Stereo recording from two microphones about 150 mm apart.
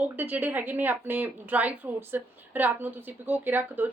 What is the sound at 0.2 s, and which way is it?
Speech, 10° right (ahead or behind).